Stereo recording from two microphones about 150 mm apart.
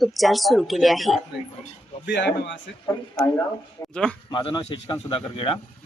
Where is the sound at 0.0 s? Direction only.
Centre (ahead or behind).